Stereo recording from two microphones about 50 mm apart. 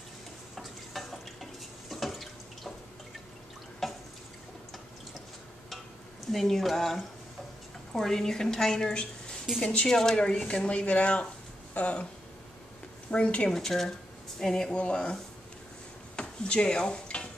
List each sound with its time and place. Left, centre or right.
0.6 s stir: centre
3.8 s drip: centre
6.2 s speech: centre; by 12.1 s left
13.1 s speech: left
13.5 s speech: centre
14.7 s speech: left
16.2 s stir: centre